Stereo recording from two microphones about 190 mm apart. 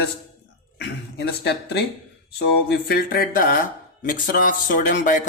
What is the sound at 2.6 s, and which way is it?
Speech, 55° left (ahead or behind).